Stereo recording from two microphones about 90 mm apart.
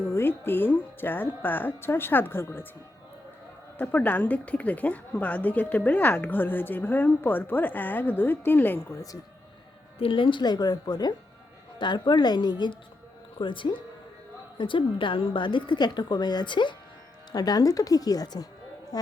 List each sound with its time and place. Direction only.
0.1 s speech: 25° left (ahead or behind)
3.8 s speech: 20° left (ahead or behind)
10.0 s a woman's voice: 70° left (ahead or behind)
13.4 s a woman's voice: 65° left (ahead or behind)
17.3 s speech: 45° left (ahead or behind)